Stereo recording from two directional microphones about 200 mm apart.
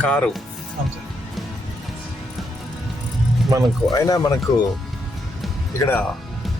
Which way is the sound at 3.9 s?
20° left (ahead or behind).